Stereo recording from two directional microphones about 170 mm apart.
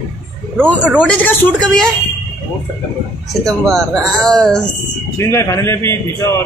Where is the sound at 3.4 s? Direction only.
Centre (ahead or behind).